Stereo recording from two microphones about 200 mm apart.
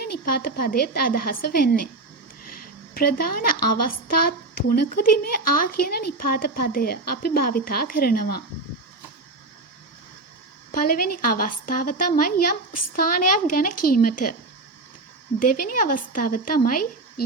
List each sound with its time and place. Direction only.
0.0 s a woman's voice: 50° left (ahead or behind)
10.7 s a woman's voice: 45° left (ahead or behind)
15.4 s a woman's voice: 45° left (ahead or behind)